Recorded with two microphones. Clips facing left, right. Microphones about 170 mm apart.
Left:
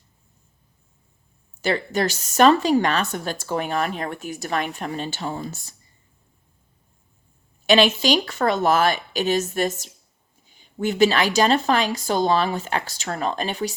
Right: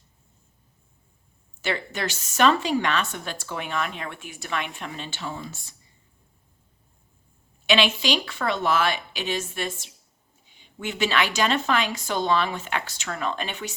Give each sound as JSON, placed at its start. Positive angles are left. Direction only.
{"t": 1.6, "sound": "a woman's voice", "side_deg": 40}
{"t": 7.7, "sound": "a woman's voice", "side_deg": 40}